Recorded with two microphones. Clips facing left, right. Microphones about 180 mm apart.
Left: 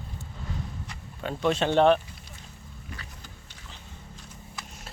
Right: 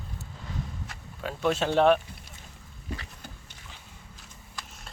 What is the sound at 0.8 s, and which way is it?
Speech, 5° right (ahead or behind).